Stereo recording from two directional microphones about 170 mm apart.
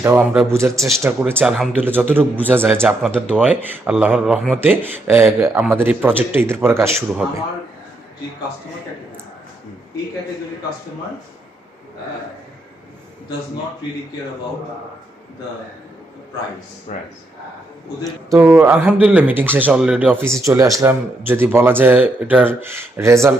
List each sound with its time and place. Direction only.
0.0 s speech: 10° right (ahead or behind)
7.2 s speech: 5° right (ahead or behind)
16.9 s speech: 45° left (ahead or behind)
18.0 s speech: 15° right (ahead or behind)